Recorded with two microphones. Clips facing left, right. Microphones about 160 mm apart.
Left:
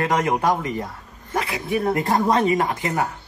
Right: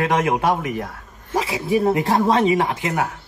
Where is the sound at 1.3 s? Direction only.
25° right (ahead or behind).